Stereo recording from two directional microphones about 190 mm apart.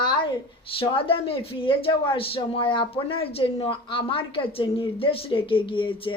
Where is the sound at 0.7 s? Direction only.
30° left (ahead or behind).